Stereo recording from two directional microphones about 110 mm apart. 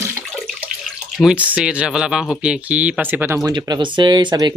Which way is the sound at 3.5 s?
45° right (ahead or behind).